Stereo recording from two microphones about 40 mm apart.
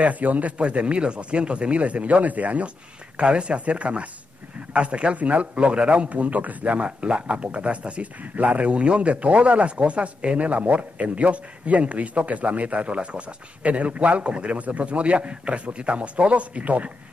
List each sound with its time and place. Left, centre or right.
0.0 s speech: right
3.2 s speech: right
6.0 s speech: right